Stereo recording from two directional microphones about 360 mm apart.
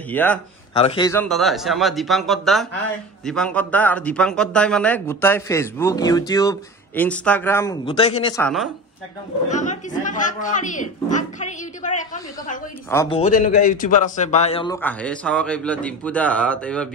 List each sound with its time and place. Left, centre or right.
0.1 s a man's voice: centre
9.5 s a man's voice: centre
12.9 s speech: centre
13.6 s a man's voice: left; by 16.9 s centre